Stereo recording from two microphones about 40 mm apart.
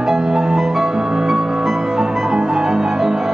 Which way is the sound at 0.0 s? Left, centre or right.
Centre.